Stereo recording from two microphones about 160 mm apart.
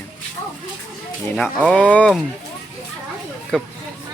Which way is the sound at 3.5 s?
5° left (ahead or behind).